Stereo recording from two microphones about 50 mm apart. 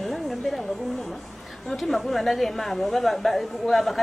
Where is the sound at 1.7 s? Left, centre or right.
Centre.